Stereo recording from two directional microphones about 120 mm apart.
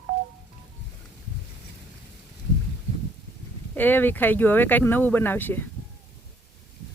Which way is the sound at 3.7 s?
15° left (ahead or behind).